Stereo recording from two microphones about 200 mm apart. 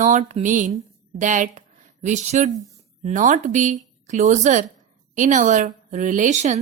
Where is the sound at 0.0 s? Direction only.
35° right (ahead or behind).